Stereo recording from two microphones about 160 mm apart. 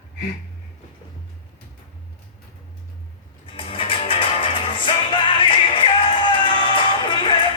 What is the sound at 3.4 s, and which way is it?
Music, 35° left (ahead or behind).